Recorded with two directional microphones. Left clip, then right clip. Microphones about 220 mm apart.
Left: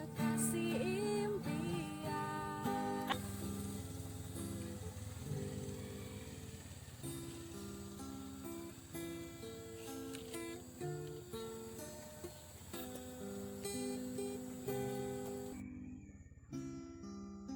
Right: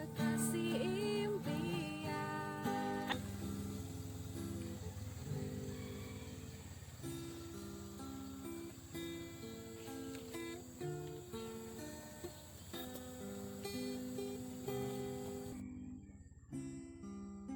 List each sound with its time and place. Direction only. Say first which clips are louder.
0.0 s music: even; centre (ahead or behind)
9.9 s music: even; 5° left (ahead or behind)
13.6 s music: left 1 dB; 10° left (ahead or behind)